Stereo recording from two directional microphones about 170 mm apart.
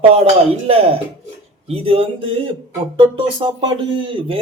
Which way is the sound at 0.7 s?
35° right (ahead or behind).